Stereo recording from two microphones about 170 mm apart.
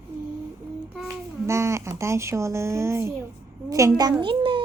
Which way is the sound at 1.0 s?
15° right (ahead or behind).